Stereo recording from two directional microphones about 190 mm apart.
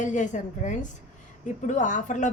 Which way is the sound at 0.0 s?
40° left (ahead or behind).